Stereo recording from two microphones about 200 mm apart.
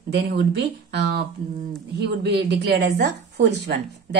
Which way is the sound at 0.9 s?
55° right (ahead or behind).